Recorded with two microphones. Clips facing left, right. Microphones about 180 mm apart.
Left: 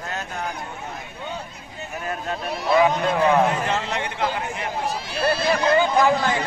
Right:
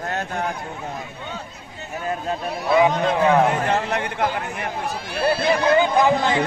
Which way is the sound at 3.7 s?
55° right (ahead or behind).